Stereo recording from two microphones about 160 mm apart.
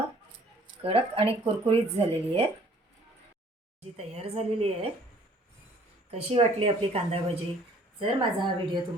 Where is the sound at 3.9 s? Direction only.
40° right (ahead or behind).